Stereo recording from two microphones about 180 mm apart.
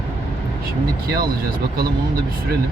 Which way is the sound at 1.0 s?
55° right (ahead or behind).